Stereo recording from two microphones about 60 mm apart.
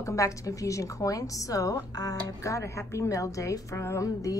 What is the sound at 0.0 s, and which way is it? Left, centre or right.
A woman's voice, left.